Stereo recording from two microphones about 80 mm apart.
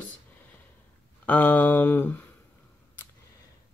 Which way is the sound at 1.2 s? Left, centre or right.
Left.